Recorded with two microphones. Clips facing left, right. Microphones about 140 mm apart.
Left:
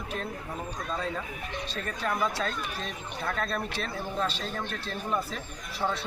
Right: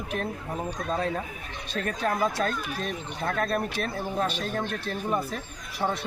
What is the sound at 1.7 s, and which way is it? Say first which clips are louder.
Speech: right 5 dB; 45° right (ahead or behind).